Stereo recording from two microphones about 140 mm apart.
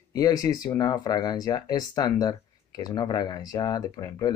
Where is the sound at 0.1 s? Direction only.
25° left (ahead or behind).